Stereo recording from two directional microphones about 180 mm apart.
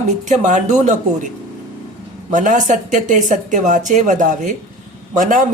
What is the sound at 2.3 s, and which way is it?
Speech, 45° right (ahead or behind).